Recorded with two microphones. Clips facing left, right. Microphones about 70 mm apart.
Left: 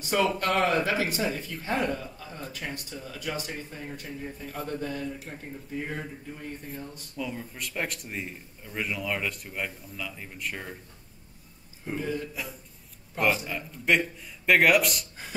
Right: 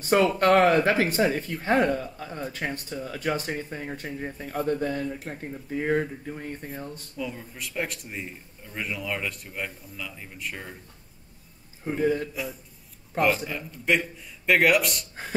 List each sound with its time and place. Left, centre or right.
0.0 s speech: right
7.2 s a man's voice: centre
11.8 s speech: right
13.5 s a man's voice: centre